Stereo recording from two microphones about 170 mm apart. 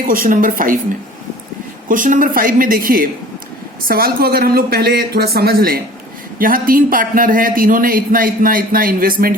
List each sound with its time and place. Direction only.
0.1 s a woman's voice: 55° right (ahead or behind)
1.9 s a man's voice: 50° right (ahead or behind)